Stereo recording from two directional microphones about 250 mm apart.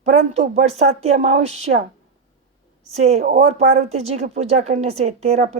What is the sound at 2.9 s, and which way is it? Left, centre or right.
Speech, right.